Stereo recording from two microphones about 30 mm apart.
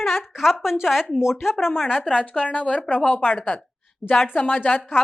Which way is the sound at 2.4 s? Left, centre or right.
Left.